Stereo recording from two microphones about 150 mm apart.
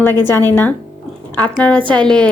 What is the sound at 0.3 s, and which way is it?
Speech, 15° left (ahead or behind).